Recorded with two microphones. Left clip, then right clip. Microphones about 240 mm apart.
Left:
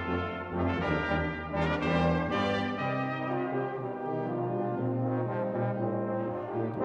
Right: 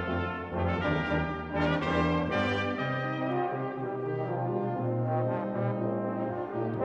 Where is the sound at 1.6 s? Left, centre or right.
Right.